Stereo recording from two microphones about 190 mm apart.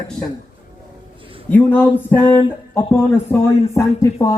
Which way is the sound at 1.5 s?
10° left (ahead or behind).